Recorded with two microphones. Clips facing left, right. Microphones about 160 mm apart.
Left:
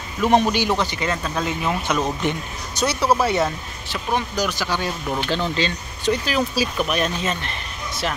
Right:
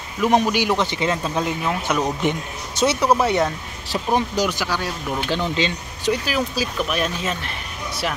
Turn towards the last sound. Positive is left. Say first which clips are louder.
# left 1 dB
turn(degrees=-5)  # may be behind; listen again after turning